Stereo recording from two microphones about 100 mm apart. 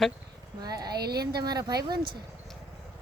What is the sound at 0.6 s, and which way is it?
Speech, 40° right (ahead or behind).